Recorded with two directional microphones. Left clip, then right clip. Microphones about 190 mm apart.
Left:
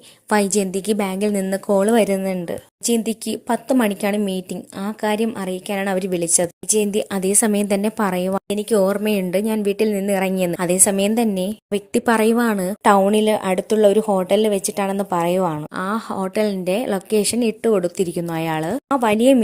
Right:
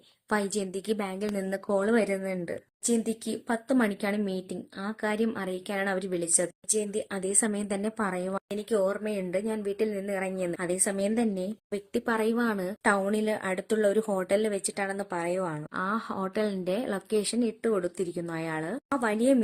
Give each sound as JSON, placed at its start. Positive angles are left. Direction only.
{"t": 0.3, "sound": "a woman's voice", "side_deg": 40}